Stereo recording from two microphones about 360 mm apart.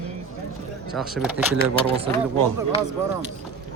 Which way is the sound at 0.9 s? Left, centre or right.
Centre.